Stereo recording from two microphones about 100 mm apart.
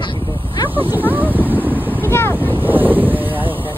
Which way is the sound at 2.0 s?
25° left (ahead or behind).